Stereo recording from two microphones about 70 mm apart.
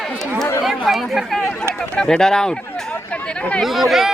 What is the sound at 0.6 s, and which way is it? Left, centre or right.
Speech, centre.